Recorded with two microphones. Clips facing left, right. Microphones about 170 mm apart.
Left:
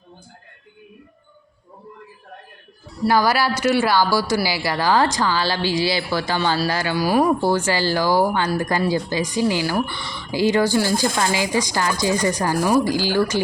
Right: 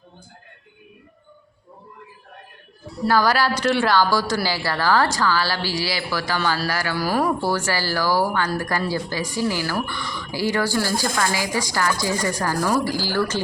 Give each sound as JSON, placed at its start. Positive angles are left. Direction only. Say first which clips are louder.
{"t": 3.1, "sound": "speech", "louder": "left 1 dB", "side_deg": 10}